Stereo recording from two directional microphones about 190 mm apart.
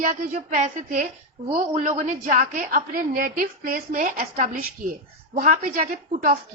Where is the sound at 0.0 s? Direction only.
40° right (ahead or behind).